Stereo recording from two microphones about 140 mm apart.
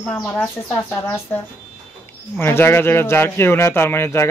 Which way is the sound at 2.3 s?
15° left (ahead or behind).